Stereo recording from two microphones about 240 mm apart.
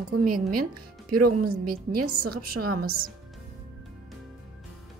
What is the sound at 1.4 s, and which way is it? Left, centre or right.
A woman's voice, right.